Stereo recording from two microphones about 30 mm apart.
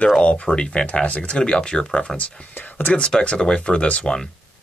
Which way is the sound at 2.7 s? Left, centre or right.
Left.